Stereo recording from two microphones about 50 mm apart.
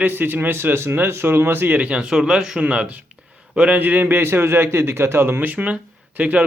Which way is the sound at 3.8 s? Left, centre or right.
Right.